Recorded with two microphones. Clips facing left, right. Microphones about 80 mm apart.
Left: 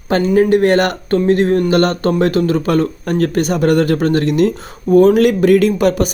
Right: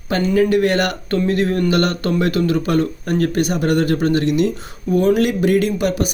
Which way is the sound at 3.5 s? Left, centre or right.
Left.